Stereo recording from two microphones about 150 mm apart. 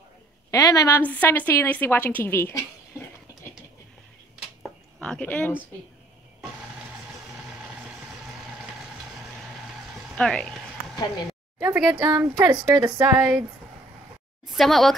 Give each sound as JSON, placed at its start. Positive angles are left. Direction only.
{"t": 0.5, "sound": "a woman's voice", "side_deg": 25}
{"t": 5.0, "sound": "a woman's voice", "side_deg": 10}
{"t": 10.1, "sound": "speech", "side_deg": 5}
{"t": 11.6, "sound": "speech", "side_deg": -5}
{"t": 12.0, "sound": "speech", "side_deg": -25}
{"t": 14.5, "sound": "speech", "side_deg": 0}